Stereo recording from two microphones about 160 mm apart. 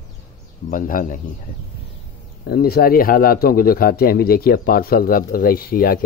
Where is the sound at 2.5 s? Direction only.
70° left (ahead or behind).